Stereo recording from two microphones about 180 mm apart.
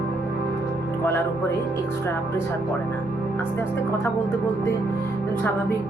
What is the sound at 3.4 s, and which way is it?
Speech, 15° left (ahead or behind).